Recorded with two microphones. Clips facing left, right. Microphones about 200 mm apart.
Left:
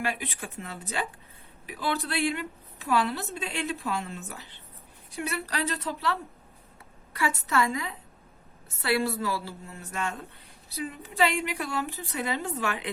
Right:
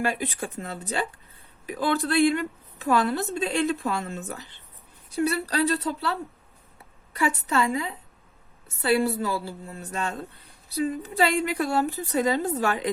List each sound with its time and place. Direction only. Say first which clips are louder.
0.0 s a woman's voice: right 5 dB; 40° right (ahead or behind)
7.2 s a woman's voice: right 2 dB; 30° right (ahead or behind)